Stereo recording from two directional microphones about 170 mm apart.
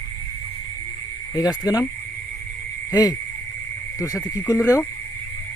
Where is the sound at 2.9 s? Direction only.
20° left (ahead or behind).